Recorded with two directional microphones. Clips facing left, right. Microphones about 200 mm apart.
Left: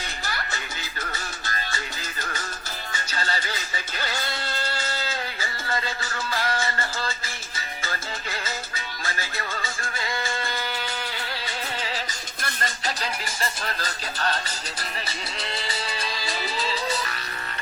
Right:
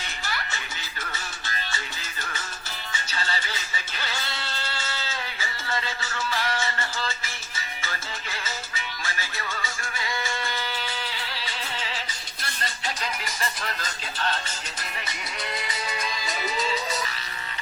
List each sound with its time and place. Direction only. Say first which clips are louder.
0.3 s music: even; 40° left (ahead or behind)
2.9 s music: left 2 dB; 40° left (ahead or behind)
12.4 s music: left 3 dB; 45° left (ahead or behind); by 16.8 s 30° left (ahead or behind)